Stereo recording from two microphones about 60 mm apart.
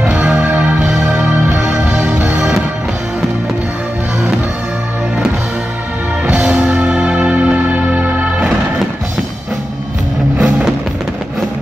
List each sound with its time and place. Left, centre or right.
0.0 s music: centre
6.2 s music: centre
10.3 s music: centre